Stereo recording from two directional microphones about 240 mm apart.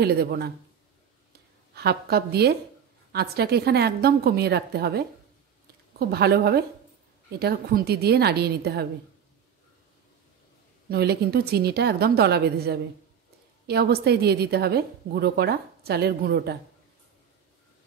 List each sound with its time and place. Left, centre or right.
0.0 s a woman's voice: right
1.7 s a woman's voice: right
10.9 s a woman's voice: right